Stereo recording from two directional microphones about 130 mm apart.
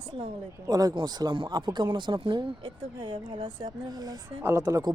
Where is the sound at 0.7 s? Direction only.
30° right (ahead or behind).